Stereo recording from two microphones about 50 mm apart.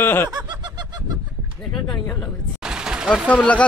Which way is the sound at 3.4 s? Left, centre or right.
Left.